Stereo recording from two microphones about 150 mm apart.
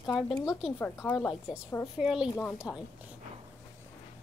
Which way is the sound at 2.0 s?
5° right (ahead or behind).